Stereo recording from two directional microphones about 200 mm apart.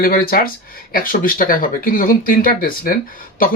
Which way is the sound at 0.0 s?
45° left (ahead or behind).